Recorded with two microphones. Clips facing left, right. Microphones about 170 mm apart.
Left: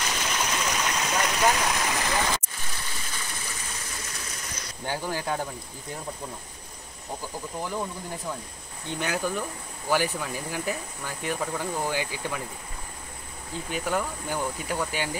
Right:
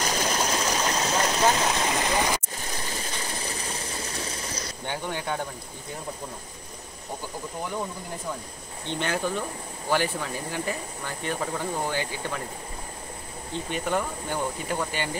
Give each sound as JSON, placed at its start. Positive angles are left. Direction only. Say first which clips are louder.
{"t": 0.0, "sound": "a sound", "louder": "right 4 dB", "side_deg": -40}
{"t": 2.5, "sound": "stream", "louder": "right 5 dB", "side_deg": -40}
{"t": 4.8, "sound": "speech", "louder": "left 2 dB", "side_deg": 0}
{"t": 8.8, "sound": "speech", "louder": "right 1 dB", "side_deg": 5}
{"t": 13.7, "sound": "speech", "louder": "even", "side_deg": 5}